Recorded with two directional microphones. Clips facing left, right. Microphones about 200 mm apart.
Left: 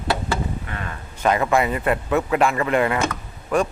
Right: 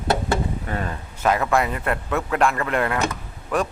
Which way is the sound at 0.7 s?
35° right (ahead or behind).